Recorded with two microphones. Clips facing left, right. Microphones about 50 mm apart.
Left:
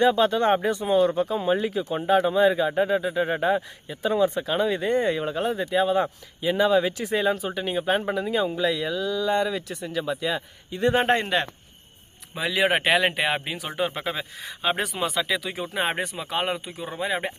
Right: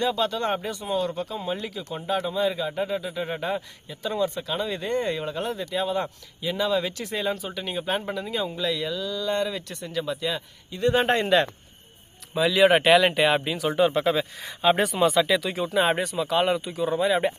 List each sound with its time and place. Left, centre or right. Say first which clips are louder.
0.0 s a man's voice: left 5 dB; left
10.8 s a man's voice: left 1 dB; left
12.3 s speech: right 4 dB; centre
15.7 s a man's voice: right 4 dB; left